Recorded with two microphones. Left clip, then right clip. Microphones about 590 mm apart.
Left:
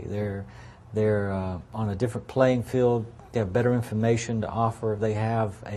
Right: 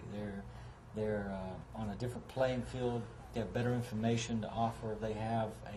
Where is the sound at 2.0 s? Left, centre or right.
Left.